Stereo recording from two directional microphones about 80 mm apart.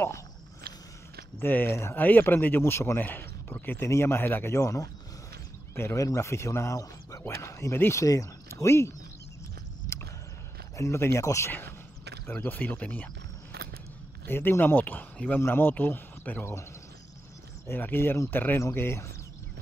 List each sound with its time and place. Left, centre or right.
1.4 s speech: left
10.8 s speech: left
12.3 s speech: left
14.2 s speech: left
17.6 s speech: left